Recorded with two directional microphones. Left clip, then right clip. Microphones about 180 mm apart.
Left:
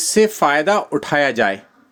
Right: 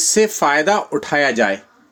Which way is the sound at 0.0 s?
10° left (ahead or behind).